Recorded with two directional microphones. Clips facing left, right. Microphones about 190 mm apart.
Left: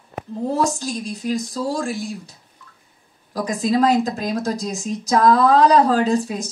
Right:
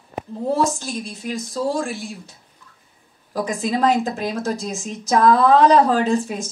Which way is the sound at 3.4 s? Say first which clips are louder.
Left 2 dB; 40° left (ahead or behind).